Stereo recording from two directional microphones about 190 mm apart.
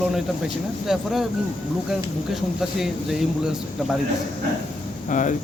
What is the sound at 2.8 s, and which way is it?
Speech, centre (ahead or behind).